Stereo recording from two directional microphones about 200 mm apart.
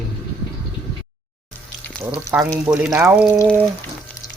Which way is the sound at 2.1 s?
10° right (ahead or behind).